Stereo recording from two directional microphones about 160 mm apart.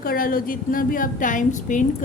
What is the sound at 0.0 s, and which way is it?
A woman's voice, 65° left (ahead or behind).